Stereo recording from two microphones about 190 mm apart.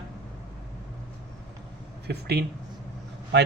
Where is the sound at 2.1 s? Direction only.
55° right (ahead or behind).